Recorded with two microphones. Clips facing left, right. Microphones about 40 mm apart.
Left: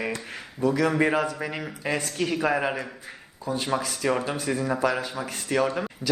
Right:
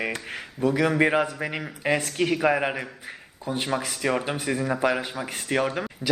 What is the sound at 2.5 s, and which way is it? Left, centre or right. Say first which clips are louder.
Speech: even; centre.